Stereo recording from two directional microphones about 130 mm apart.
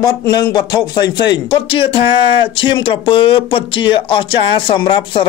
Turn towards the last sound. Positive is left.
turn(degrees=40)  # may be behind; listen again after turning